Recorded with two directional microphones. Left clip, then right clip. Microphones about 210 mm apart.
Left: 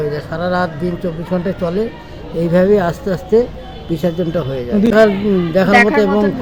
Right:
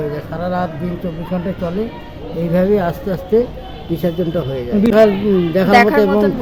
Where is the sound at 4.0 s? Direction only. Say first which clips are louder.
Left 1 dB; 10° left (ahead or behind).